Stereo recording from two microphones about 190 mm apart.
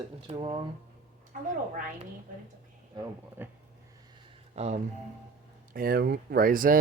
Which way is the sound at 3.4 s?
10° right (ahead or behind).